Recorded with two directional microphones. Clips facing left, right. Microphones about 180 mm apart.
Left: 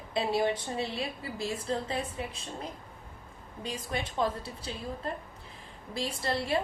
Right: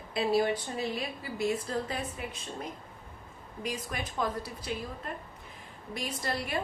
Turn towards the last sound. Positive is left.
turn(degrees=25)  # may be behind; listen again after turning